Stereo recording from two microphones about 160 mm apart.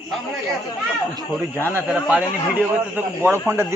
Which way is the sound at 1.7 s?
10° right (ahead or behind).